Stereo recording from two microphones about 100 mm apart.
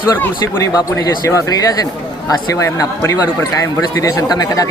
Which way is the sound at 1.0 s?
35° left (ahead or behind).